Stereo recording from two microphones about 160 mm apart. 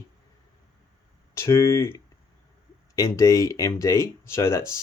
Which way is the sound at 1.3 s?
15° left (ahead or behind).